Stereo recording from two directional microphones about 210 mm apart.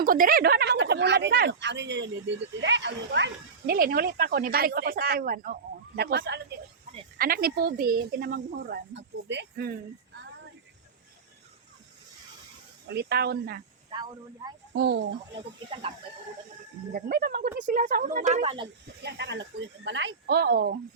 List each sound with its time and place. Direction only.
0.0 s speech: 40° right (ahead or behind)
12.9 s speech: 50° right (ahead or behind)
13.9 s speech: 20° right (ahead or behind)
14.7 s speech: 55° right (ahead or behind)
16.9 s a woman's voice: 45° right (ahead or behind); by 18.7 s 25° right (ahead or behind)
19.0 s speech: 55° right (ahead or behind)